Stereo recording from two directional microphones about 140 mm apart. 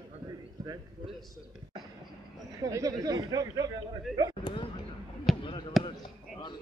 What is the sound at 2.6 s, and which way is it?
Speech, 25° right (ahead or behind).